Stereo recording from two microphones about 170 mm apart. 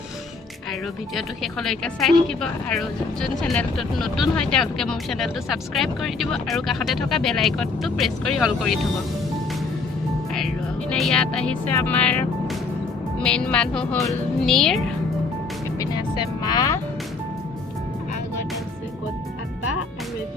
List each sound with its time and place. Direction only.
0.7 s a woman's voice: centre (ahead or behind)
10.3 s a woman's voice: centre (ahead or behind)
15.8 s music: 25° left (ahead or behind)